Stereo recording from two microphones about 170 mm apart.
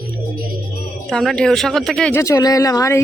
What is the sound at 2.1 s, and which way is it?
Speech, 20° left (ahead or behind).